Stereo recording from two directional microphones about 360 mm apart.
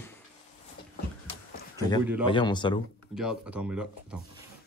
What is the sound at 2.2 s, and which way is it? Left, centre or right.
Speech, centre.